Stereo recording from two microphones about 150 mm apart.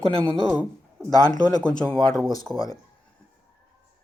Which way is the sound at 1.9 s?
5° left (ahead or behind).